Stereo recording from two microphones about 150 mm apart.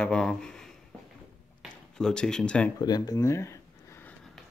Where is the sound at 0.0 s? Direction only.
5° left (ahead or behind).